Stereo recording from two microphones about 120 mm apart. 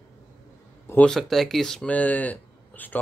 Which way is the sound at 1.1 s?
Centre (ahead or behind).